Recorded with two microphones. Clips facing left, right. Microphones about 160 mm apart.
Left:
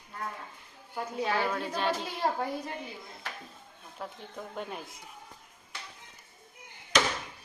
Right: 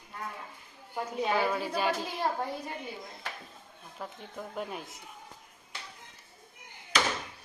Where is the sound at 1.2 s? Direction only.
20° right (ahead or behind).